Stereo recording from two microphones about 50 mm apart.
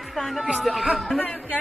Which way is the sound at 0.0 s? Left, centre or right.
Centre.